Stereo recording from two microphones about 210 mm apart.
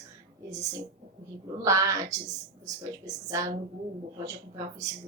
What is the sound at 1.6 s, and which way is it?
Speech, 15° right (ahead or behind).